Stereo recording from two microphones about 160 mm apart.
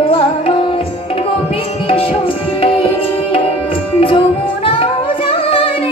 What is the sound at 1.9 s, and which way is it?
Tabla, 35° left (ahead or behind).